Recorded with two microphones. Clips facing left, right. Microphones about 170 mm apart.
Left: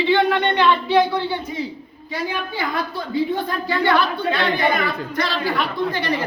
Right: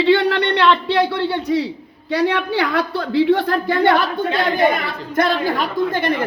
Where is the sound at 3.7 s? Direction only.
50° right (ahead or behind).